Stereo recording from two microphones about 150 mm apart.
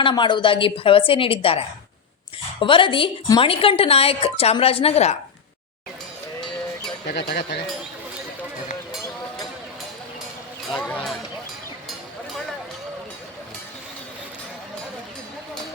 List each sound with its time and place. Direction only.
0.0 s speech: 30° left (ahead or behind)
7.1 s speech: 90° left
10.7 s a sound: 10° left (ahead or behind)